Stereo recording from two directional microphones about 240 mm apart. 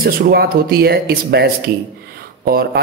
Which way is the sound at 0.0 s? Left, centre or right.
Right.